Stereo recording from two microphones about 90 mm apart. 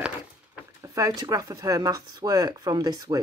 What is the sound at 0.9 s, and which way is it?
Speech, 40° right (ahead or behind).